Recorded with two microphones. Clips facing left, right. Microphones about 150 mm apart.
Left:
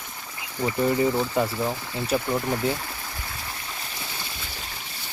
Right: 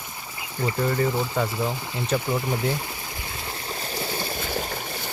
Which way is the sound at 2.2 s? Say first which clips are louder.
Even; 10° right (ahead or behind).